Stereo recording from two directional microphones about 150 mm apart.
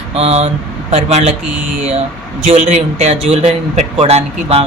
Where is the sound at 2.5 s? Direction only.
50° right (ahead or behind).